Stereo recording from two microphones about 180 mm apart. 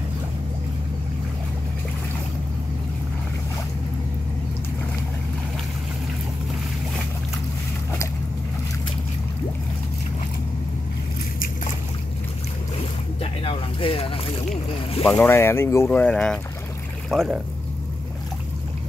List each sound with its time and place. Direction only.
13.2 s boat: 30° left (ahead or behind)
15.0 s speech: 10° left (ahead or behind)